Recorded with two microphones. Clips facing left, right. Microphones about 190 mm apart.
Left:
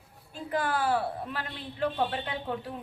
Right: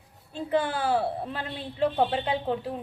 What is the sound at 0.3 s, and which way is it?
A woman's voice, 25° right (ahead or behind).